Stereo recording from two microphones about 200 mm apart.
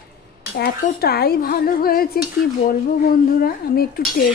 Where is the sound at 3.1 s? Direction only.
45° left (ahead or behind).